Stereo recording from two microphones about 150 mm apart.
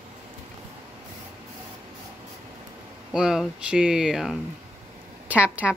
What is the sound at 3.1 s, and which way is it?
Speech, 5° right (ahead or behind).